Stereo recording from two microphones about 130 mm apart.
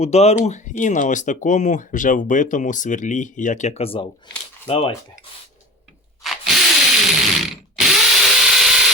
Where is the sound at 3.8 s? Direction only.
45° left (ahead or behind).